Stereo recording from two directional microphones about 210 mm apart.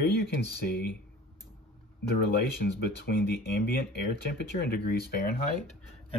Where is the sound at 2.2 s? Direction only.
50° left (ahead or behind).